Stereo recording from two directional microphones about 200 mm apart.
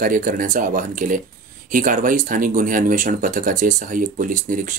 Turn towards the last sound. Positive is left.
turn(degrees=-40)  # may be behind; listen again after turning